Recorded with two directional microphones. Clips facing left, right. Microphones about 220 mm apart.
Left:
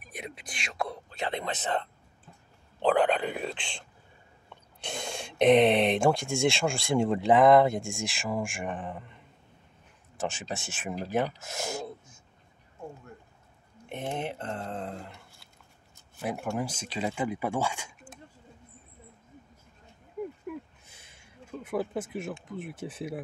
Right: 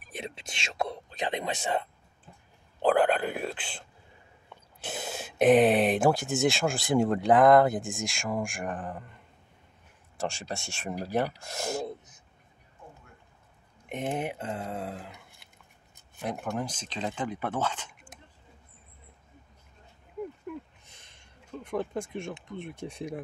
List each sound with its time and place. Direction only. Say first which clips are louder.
0.0 s speech: right 2 dB; 30° right (ahead or behind); by 3.8 s 5° right (ahead or behind)
4.8 s speech: even; 5° right (ahead or behind)
13.8 s speech: right 2 dB; 15° right (ahead or behind); by 18.1 s 10° left (ahead or behind)
20.4 s a sound: left 1 dB; 5° left (ahead or behind)
22.5 s speech: left 1 dB; 5° left (ahead or behind)